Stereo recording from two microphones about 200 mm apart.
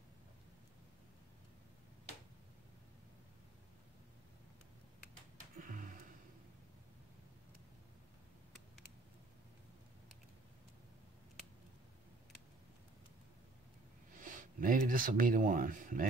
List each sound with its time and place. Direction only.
5.6 s gasp: 40° right (ahead or behind)
14.2 s speech: 40° right (ahead or behind)